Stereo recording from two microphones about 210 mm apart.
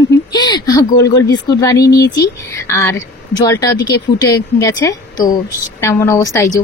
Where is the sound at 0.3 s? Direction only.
20° left (ahead or behind).